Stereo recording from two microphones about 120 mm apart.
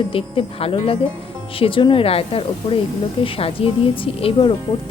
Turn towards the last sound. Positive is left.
turn(degrees=50)  # may be behind; listen again after turning